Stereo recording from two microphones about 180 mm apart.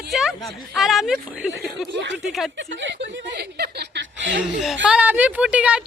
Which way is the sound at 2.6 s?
85° right.